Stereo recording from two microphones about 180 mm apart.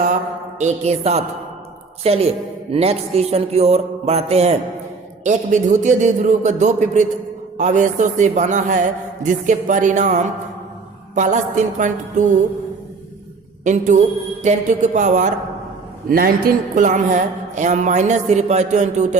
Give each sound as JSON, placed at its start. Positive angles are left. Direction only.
{"t": 0.6, "sound": "a man's voice", "side_deg": -35}
{"t": 13.7, "sound": "a man's voice", "side_deg": -45}
{"t": 16.0, "sound": "a man's voice", "side_deg": -55}